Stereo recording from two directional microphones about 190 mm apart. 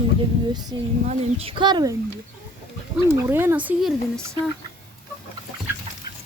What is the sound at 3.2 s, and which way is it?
A woman's voice, 10° right (ahead or behind).